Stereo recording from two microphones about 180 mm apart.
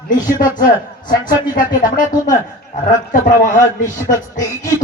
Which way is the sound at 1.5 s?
50° left (ahead or behind).